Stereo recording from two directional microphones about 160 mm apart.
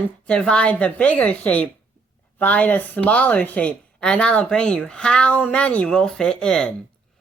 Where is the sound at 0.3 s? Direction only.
5° left (ahead or behind).